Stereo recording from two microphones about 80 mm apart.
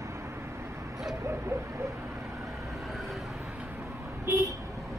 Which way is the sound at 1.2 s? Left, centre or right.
Right.